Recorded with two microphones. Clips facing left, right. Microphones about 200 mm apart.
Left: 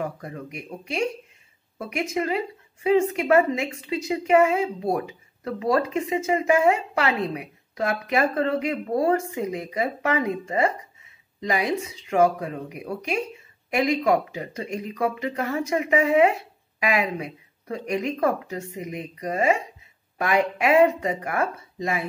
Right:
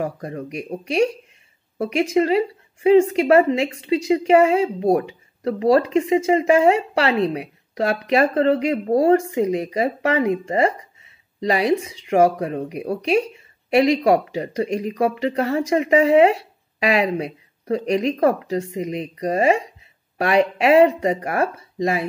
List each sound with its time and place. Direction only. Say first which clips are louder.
0.0 s speech: right 5 dB; 35° right (ahead or behind)
1.8 s speech: right 8 dB; 30° right (ahead or behind)
14.7 s speech: right 7 dB; 90° right
15.0 s speech: right 5 dB; 30° right (ahead or behind)